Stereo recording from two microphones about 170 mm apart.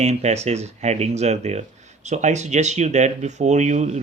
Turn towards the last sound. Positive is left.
turn(degrees=-45)  # may be behind; listen again after turning